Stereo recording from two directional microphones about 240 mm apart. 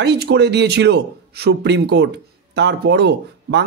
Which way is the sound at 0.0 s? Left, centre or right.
Right.